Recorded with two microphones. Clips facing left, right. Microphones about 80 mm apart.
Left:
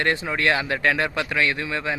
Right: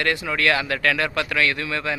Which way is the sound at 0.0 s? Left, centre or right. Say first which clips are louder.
Even; left.